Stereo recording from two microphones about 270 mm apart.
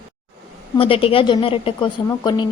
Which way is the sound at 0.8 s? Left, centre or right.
Left.